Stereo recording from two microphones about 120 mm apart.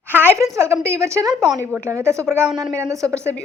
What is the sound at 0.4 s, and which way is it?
A woman's voice, 25° right (ahead or behind).